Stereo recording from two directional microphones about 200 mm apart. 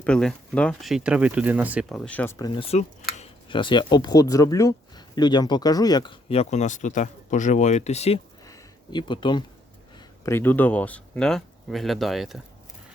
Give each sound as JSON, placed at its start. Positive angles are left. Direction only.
{"t": 0.0, "sound": "speech", "side_deg": 5}
{"t": 2.6, "sound": "speech", "side_deg": 30}
{"t": 8.4, "sound": "a sound", "side_deg": 20}
{"t": 10.2, "sound": "speech", "side_deg": 10}